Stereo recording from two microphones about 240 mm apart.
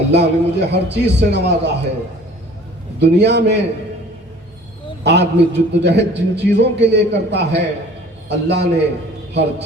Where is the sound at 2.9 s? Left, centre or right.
Right.